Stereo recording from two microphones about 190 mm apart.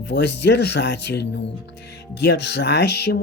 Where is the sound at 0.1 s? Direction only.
60° left (ahead or behind).